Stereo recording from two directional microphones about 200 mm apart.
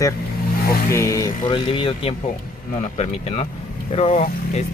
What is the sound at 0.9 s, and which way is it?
Speech, 15° left (ahead or behind).